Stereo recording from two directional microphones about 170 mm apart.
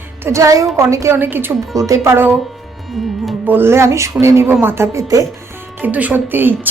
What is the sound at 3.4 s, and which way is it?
Speech, 10° right (ahead or behind).